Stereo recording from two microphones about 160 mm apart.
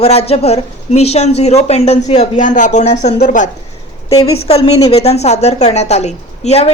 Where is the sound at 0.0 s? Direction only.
40° left (ahead or behind).